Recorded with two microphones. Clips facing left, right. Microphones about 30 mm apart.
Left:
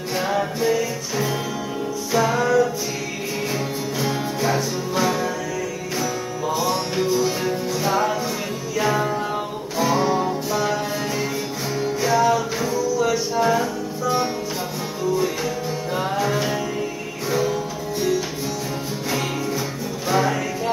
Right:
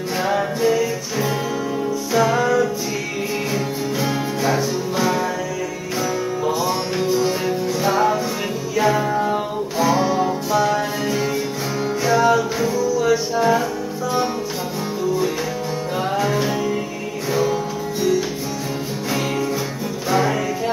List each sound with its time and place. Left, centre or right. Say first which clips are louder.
0.2 s music: right 3 dB; centre
6.6 s music: right 1 dB; centre
16.0 s music: right 2 dB; centre
20.1 s music: right 1 dB; centre